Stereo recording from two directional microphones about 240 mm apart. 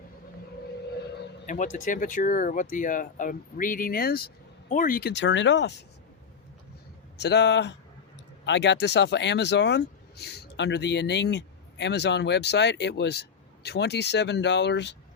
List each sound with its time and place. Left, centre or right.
1.5 s speech: left
7.2 s speech: left